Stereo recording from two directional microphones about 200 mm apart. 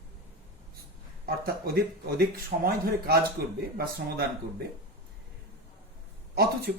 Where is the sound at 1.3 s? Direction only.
50° right (ahead or behind).